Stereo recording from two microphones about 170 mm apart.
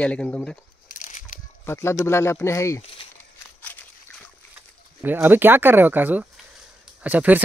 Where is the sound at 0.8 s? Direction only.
50° left (ahead or behind).